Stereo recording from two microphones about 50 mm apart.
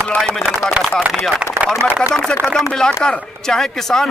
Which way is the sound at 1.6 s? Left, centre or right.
Right.